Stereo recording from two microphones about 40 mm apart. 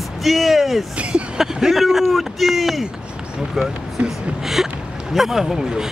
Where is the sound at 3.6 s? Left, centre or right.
Centre.